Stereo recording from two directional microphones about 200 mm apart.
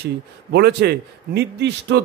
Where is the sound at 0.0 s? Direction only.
55° right (ahead or behind).